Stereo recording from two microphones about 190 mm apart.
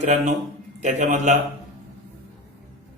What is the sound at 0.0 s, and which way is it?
A man's voice, 40° right (ahead or behind).